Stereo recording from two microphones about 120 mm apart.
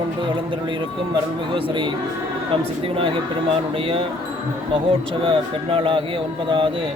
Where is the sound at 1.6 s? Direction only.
45° right (ahead or behind).